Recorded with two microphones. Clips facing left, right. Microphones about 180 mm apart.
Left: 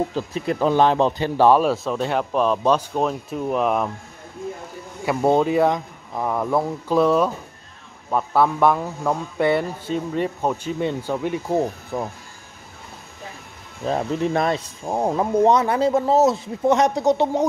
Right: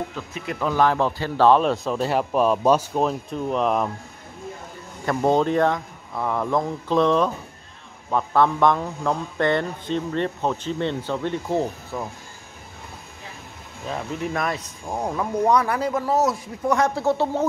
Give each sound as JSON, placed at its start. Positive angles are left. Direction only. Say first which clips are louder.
{"t": 0.1, "sound": "speech", "louder": "left 7 dB", "side_deg": 35}
{"t": 5.0, "sound": "speech", "louder": "left 2 dB", "side_deg": 10}
{"t": 13.8, "sound": "speech", "louder": "left 6 dB", "side_deg": 35}